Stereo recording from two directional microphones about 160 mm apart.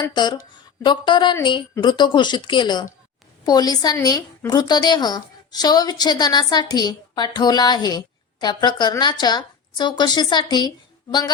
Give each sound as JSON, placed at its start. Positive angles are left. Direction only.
{"t": 0.1, "sound": "a woman's voice", "side_deg": 25}